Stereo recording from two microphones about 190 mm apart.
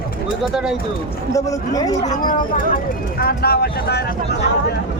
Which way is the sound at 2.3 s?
45° left (ahead or behind).